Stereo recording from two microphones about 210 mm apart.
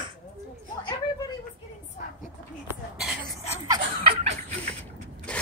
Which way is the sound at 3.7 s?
25° right (ahead or behind).